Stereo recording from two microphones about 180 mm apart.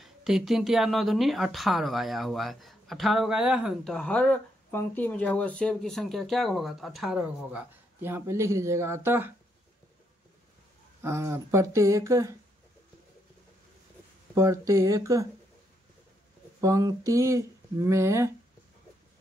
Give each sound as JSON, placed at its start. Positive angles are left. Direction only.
{"t": 0.0, "sound": "speech", "side_deg": 0}
{"t": 11.0, "sound": "speech", "side_deg": -15}
{"t": 14.3, "sound": "speech", "side_deg": -15}
{"t": 16.6, "sound": "speech", "side_deg": -20}